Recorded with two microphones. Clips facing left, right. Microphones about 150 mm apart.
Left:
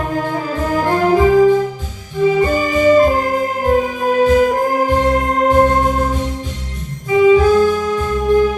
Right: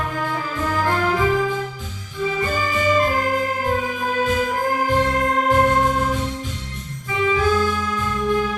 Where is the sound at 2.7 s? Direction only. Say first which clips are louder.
Left 8 dB; 35° left (ahead or behind).